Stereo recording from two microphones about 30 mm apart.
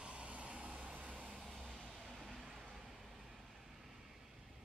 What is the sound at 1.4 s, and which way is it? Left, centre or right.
Vehicle, centre.